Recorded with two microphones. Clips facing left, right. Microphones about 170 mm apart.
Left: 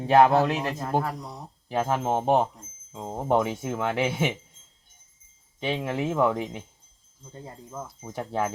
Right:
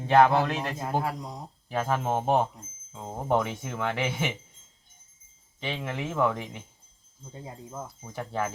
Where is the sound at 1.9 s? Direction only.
15° left (ahead or behind).